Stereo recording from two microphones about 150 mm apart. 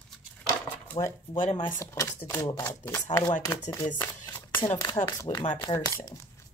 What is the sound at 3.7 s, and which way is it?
Speech, 20° left (ahead or behind).